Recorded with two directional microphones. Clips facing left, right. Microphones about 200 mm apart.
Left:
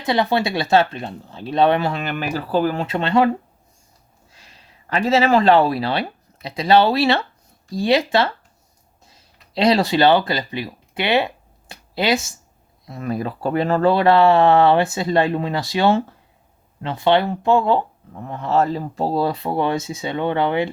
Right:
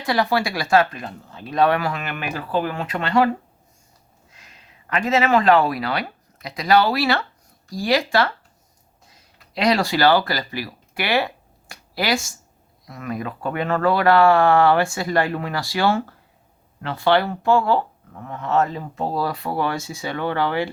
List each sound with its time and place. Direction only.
0.0 s speech: 20° left (ahead or behind)
4.4 s speech: 30° left (ahead or behind)
9.6 s speech: 25° left (ahead or behind)
11.7 s a sound: 20° left (ahead or behind)
12.8 s speech: 30° left (ahead or behind)